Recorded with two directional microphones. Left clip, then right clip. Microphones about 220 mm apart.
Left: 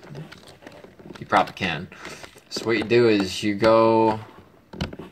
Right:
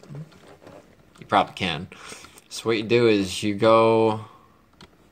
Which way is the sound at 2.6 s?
55° right (ahead or behind).